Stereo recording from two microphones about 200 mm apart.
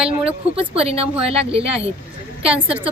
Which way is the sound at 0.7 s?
30° right (ahead or behind).